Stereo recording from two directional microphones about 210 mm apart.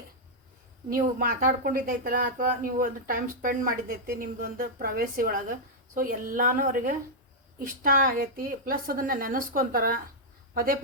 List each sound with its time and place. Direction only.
0.9 s a woman's voice: 40° right (ahead or behind)